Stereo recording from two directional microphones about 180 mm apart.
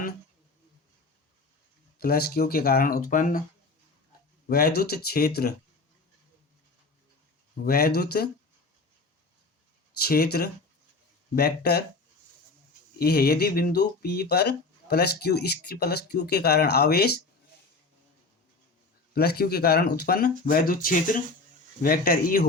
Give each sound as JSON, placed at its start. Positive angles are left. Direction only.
{"t": 2.0, "sound": "speech", "side_deg": 60}
{"t": 4.4, "sound": "speech", "side_deg": 60}
{"t": 7.6, "sound": "speech", "side_deg": 55}
{"t": 10.0, "sound": "speech", "side_deg": 60}
{"t": 13.0, "sound": "speech", "side_deg": 60}
{"t": 19.1, "sound": "speech", "side_deg": 60}